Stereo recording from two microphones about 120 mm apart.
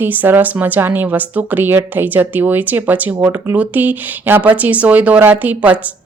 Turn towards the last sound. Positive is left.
turn(degrees=-10)  # may be behind; listen again after turning